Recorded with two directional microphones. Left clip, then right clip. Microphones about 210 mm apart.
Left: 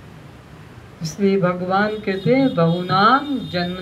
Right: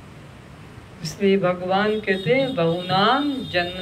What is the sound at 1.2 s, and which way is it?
Speech, 50° right (ahead or behind).